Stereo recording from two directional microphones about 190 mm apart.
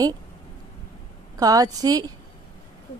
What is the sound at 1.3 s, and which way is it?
Speech, 20° right (ahead or behind).